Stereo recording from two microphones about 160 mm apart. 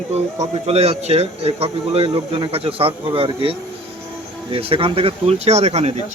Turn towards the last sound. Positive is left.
turn(degrees=-40)  # may be behind; listen again after turning